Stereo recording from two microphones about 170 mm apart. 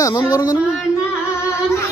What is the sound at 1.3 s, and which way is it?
Music, 15° left (ahead or behind).